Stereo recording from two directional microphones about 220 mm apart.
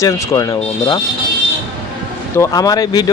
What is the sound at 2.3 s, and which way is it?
Speech, 15° left (ahead or behind).